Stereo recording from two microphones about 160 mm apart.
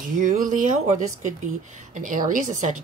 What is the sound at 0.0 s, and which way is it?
Speech, 60° right (ahead or behind).